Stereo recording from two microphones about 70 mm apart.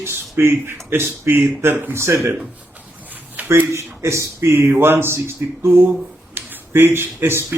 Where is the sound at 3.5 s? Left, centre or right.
Right.